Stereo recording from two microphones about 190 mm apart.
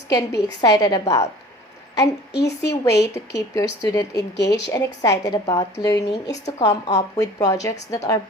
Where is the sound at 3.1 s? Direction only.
65° left (ahead or behind).